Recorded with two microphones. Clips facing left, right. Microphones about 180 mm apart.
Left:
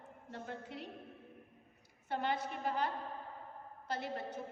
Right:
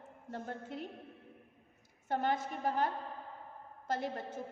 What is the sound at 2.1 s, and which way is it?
Speech, 45° right (ahead or behind).